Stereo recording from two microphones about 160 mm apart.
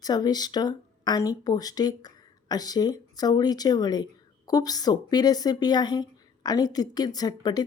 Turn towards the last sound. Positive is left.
turn(degrees=25)  # may be behind; listen again after turning